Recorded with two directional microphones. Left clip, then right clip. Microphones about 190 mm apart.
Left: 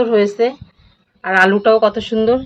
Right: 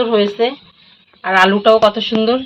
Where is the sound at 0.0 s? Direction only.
15° left (ahead or behind).